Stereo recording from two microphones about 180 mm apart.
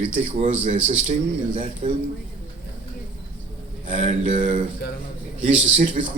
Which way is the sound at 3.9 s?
40° right (ahead or behind).